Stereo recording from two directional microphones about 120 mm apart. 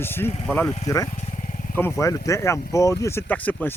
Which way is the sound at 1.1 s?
65° left (ahead or behind).